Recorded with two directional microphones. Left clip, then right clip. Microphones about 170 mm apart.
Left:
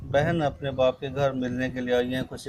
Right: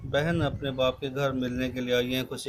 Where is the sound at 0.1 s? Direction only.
15° left (ahead or behind).